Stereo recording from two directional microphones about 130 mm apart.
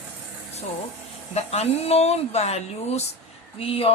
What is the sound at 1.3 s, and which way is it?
Speech, 55° left (ahead or behind).